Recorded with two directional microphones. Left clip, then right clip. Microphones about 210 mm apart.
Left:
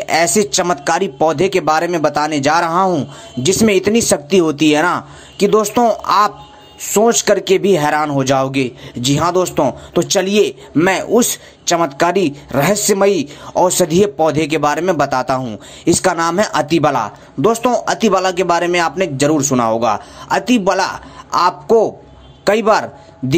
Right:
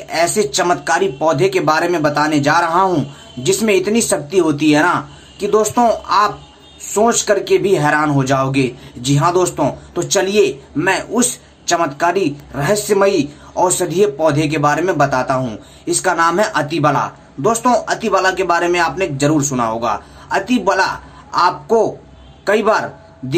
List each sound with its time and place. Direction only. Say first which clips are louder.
0.0 s speech: left 2 dB; 40° left (ahead or behind)